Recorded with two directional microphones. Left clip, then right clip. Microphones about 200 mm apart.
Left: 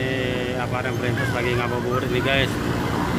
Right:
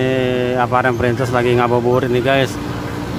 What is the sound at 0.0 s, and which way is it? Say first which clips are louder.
Speech: right 8 dB; 35° right (ahead or behind).